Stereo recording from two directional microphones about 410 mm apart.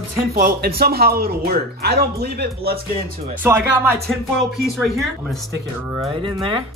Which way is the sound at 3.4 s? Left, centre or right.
Centre.